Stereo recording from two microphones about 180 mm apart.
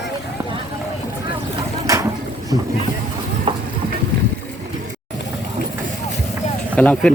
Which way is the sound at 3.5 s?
30° right (ahead or behind).